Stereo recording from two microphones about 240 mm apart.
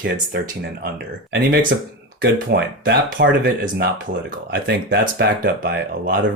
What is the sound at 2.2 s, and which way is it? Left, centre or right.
Speech, right.